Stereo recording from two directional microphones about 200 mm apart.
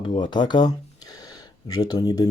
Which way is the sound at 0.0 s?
25° left (ahead or behind).